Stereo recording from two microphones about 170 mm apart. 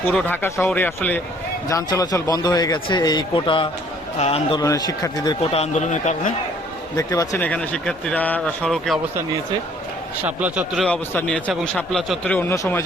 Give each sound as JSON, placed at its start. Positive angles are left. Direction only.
{"t": 0.1, "sound": "speech", "side_deg": 5}
{"t": 0.4, "sound": "a man's voice", "side_deg": 15}
{"t": 4.6, "sound": "a man's voice", "side_deg": 20}
{"t": 6.9, "sound": "a man's voice", "side_deg": 20}
{"t": 7.4, "sound": "speech", "side_deg": 5}
{"t": 10.2, "sound": "a man's voice", "side_deg": -10}
{"t": 10.8, "sound": "speech", "side_deg": 10}